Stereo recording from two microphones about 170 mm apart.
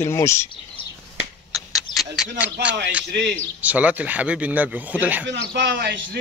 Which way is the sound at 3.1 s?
90° right.